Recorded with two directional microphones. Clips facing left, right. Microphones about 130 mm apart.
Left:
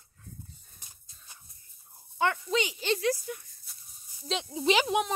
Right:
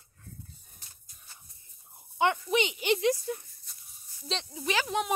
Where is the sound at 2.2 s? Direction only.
20° right (ahead or behind).